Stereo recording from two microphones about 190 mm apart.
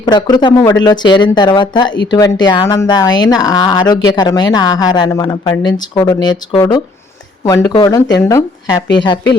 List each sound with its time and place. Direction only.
0.0 s speech: 20° left (ahead or behind)